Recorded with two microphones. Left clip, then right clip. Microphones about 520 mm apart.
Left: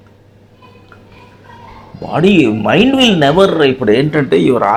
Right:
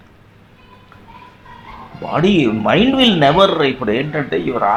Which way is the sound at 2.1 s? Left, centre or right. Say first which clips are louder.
Left 4 dB; centre.